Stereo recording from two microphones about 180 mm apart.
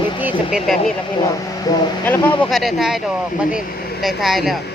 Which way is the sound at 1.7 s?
20° left (ahead or behind).